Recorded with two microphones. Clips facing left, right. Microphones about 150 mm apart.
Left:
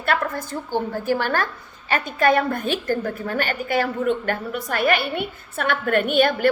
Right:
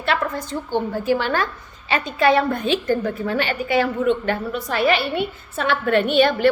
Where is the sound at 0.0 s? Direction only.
50° left (ahead or behind).